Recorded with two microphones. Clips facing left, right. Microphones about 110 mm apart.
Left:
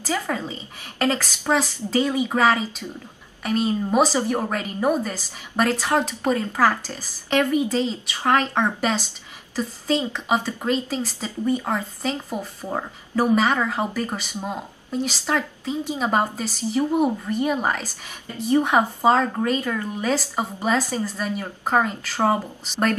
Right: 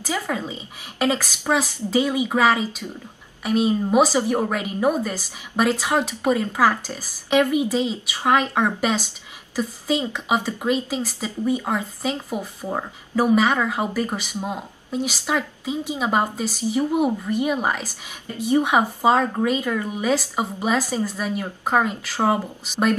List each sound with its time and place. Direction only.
0.0 s a woman's voice: 10° right (ahead or behind)